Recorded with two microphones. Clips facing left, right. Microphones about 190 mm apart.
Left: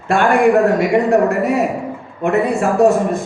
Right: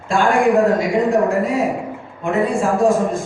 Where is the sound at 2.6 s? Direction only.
65° left (ahead or behind).